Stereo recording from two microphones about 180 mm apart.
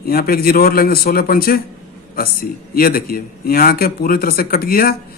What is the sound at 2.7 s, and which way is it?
A man's voice, 55° left (ahead or behind).